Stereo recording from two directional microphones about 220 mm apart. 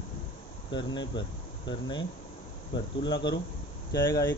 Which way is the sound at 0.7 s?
20° left (ahead or behind).